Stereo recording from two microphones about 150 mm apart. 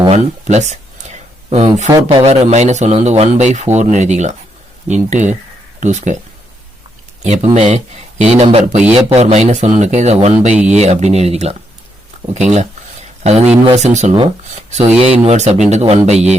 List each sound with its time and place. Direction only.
0.1 s speech: 50° right (ahead or behind)
7.3 s speech: 45° right (ahead or behind)
12.3 s a sound: 50° right (ahead or behind)
13.7 s speech: 50° right (ahead or behind)